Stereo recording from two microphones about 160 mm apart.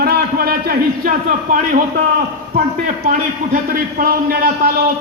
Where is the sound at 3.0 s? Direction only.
55° right (ahead or behind).